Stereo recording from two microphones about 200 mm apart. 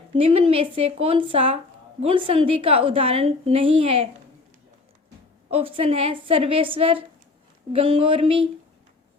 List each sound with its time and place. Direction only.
0.1 s speech: 30° right (ahead or behind)
5.5 s speech: 30° right (ahead or behind)